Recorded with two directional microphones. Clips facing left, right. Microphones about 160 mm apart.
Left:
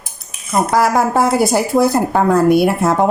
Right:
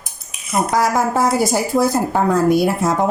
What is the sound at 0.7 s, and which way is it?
A woman's voice, 65° left (ahead or behind).